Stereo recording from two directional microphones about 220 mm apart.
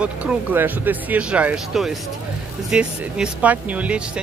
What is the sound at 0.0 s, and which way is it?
Speech, 5° right (ahead or behind).